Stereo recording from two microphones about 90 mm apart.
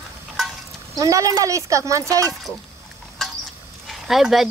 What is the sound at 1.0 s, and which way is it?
Speech, 40° right (ahead or behind).